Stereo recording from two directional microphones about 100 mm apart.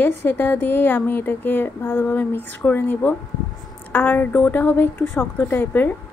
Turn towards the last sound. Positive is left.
turn(degrees=20)  # may be behind; listen again after turning